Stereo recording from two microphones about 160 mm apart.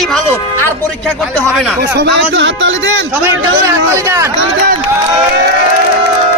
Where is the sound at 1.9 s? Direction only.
90° right.